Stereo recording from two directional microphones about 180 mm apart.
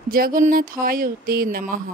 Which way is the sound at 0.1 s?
50° right (ahead or behind).